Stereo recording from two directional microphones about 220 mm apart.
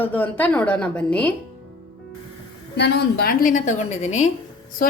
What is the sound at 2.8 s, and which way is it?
A woman's voice, 50° left (ahead or behind).